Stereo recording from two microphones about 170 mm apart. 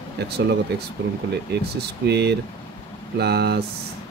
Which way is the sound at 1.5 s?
80° right.